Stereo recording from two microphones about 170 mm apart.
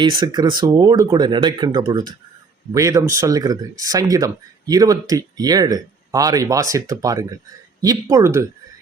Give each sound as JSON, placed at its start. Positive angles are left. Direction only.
{"t": 0.0, "sound": "speech", "side_deg": -25}